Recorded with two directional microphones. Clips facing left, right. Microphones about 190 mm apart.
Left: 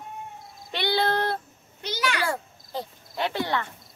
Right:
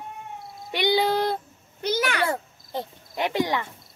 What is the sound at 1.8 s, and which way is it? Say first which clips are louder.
Speech: right 4 dB; 50° right (ahead or behind).